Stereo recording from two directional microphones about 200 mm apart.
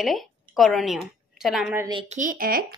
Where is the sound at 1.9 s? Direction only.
25° right (ahead or behind).